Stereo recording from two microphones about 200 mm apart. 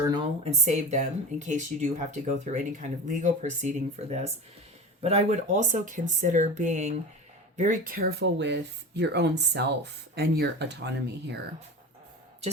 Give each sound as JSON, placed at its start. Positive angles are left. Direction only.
{"t": 0.6, "sound": "speech", "side_deg": -35}